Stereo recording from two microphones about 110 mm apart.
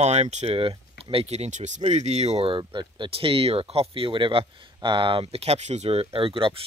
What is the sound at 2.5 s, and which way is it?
Speech, 50° right (ahead or behind).